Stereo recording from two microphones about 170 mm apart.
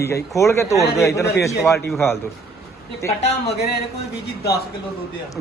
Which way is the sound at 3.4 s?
70° left (ahead or behind).